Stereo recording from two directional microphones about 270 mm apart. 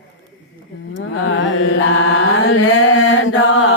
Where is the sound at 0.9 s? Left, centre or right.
Left.